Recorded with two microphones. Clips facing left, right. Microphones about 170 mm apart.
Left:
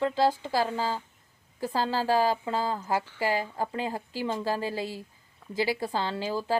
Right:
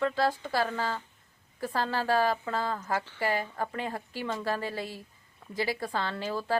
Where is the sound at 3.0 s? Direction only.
15° left (ahead or behind).